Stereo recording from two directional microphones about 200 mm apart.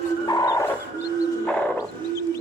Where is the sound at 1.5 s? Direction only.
5° left (ahead or behind).